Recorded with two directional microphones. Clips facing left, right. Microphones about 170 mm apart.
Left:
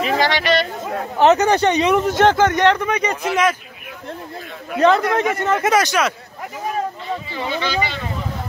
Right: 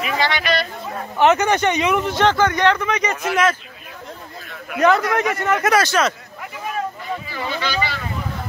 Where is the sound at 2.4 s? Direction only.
20° left (ahead or behind).